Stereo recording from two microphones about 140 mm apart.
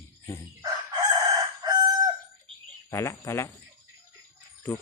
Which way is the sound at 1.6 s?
30° right (ahead or behind).